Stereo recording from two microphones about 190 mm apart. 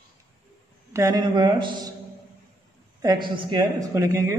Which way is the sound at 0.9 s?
20° right (ahead or behind).